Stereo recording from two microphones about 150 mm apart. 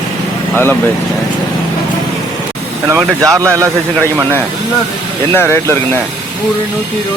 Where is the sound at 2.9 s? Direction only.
20° right (ahead or behind).